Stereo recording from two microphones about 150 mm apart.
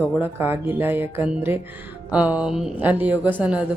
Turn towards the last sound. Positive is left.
turn(degrees=-10)  # may be behind; listen again after turning